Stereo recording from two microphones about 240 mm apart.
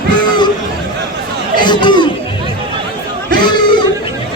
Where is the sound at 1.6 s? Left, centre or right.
Centre.